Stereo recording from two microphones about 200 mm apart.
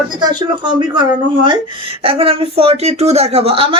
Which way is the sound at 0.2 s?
20° right (ahead or behind).